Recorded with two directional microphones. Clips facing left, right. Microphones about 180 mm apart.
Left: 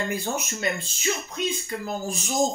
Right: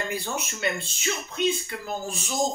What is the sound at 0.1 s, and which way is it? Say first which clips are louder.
Speech: left 2 dB; 45° left (ahead or behind).